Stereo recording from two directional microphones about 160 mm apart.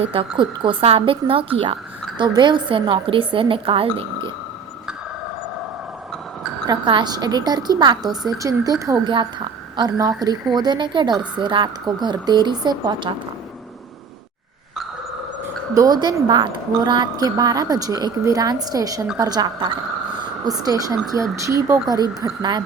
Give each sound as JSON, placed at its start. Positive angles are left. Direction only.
{"t": 0.0, "sound": "a woman's voice", "side_deg": -35}
{"t": 6.7, "sound": "a woman's voice", "side_deg": -30}
{"t": 15.7, "sound": "a woman's voice", "side_deg": -25}